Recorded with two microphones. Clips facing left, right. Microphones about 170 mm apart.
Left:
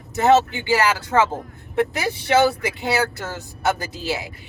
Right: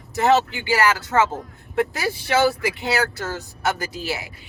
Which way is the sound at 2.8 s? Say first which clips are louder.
Left 2 dB; 20° left (ahead or behind).